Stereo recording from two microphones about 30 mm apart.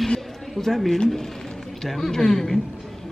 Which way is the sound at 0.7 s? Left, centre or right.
Centre.